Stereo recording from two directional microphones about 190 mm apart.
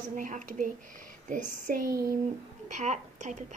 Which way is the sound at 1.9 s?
15° right (ahead or behind).